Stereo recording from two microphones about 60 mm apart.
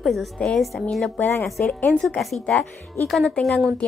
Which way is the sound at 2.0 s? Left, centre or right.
Centre.